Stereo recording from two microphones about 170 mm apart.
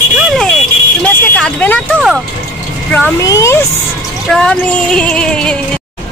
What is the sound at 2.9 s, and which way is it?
Speech, 15° left (ahead or behind).